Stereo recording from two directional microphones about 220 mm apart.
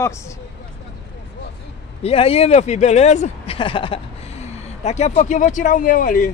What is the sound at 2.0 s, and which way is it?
Speech, 25° left (ahead or behind).